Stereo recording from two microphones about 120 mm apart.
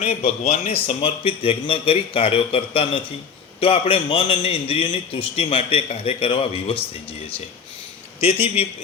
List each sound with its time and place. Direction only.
0.0 s speech: 65° left (ahead or behind)
0.9 s a man's voice: 50° left (ahead or behind)
8.2 s a man's voice: 50° left (ahead or behind)